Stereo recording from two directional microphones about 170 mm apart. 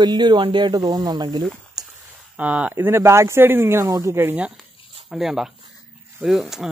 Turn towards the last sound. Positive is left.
turn(degrees=0)  # may be behind; listen again after turning